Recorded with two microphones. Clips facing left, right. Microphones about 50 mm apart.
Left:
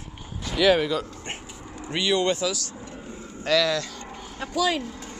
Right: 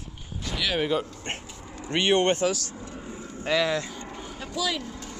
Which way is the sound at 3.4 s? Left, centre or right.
Right.